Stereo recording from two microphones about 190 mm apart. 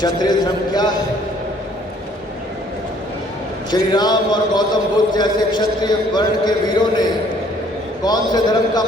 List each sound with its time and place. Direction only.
0.0 s speech: 20° left (ahead or behind)
3.7 s speech: 20° left (ahead or behind)